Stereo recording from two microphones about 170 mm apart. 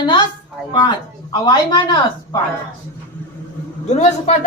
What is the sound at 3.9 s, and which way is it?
Speech, 45° left (ahead or behind).